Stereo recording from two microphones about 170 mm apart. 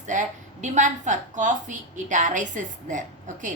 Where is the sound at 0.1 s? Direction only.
45° right (ahead or behind).